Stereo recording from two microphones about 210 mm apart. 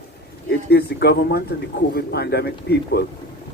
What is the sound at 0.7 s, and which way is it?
Speech, 50° left (ahead or behind).